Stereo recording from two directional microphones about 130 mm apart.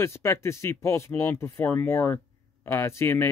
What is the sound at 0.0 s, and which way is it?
Speech, 20° left (ahead or behind).